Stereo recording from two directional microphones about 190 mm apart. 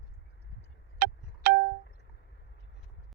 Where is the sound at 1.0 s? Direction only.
55° right (ahead or behind).